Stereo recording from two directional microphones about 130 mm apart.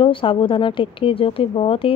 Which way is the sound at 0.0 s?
40° left (ahead or behind).